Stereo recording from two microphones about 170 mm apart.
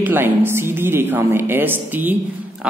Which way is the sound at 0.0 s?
10° right (ahead or behind).